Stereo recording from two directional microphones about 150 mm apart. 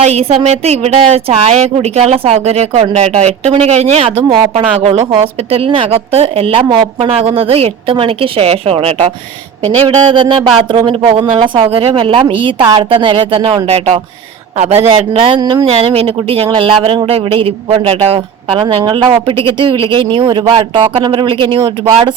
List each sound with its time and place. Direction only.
0.0 s a woman's voice: 45° right (ahead or behind)
15.4 s speech: 30° right (ahead or behind)
18.8 s speech: 30° right (ahead or behind)